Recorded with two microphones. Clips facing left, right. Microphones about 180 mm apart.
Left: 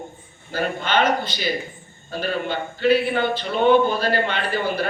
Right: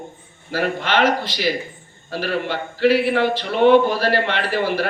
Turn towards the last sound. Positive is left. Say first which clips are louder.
# right 3 dB
turn(degrees=-80)